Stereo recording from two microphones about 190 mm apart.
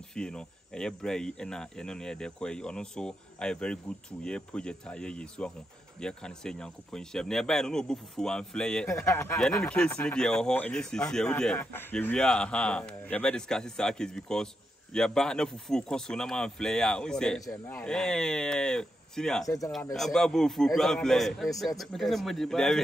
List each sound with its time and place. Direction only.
0.1 s speech: 5° left (ahead or behind)
19.4 s speech: 15° left (ahead or behind)
19.7 s speech: centre (ahead or behind)